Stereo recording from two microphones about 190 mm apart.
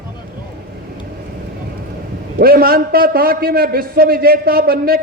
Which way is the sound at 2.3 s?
50° right (ahead or behind).